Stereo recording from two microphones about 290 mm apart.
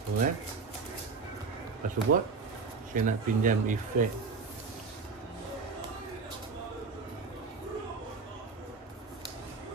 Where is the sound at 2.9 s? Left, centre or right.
Right.